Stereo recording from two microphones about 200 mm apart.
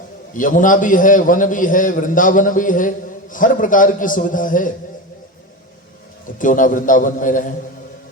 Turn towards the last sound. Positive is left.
turn(degrees=40)  # may be behind; listen again after turning